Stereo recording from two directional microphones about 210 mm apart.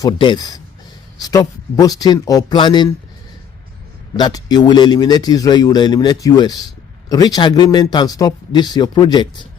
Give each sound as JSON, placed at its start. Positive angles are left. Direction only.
{"t": 0.0, "sound": "speech", "side_deg": 20}
{"t": 4.2, "sound": "speech", "side_deg": 20}